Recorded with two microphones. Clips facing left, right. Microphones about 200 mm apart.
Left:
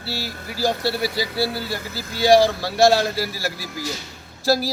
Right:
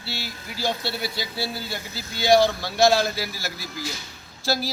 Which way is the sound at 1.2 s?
80° left.